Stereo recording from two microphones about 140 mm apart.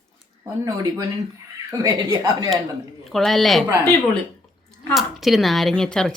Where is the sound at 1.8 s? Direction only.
25° right (ahead or behind).